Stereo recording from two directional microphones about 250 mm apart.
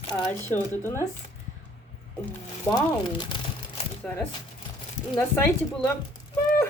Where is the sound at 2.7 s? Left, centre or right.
Centre.